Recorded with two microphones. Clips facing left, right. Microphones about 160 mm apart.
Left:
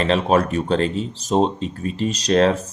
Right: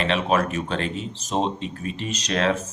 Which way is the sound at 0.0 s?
35° left (ahead or behind).